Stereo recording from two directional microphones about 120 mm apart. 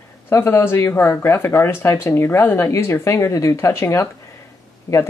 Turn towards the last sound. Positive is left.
turn(degrees=25)  # may be behind; listen again after turning